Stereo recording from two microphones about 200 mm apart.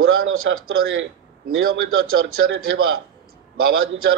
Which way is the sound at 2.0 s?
90° right.